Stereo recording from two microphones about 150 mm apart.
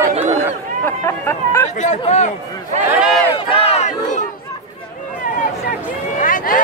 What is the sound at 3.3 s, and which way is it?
Crowd, 40° left (ahead or behind).